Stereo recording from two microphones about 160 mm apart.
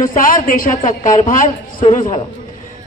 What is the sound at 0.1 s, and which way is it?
A man's voice, 60° left (ahead or behind).